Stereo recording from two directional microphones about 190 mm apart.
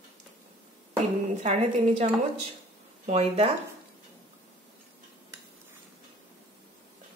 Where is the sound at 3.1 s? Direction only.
35° right (ahead or behind).